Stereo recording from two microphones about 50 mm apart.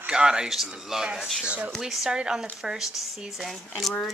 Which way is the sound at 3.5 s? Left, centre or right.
Centre.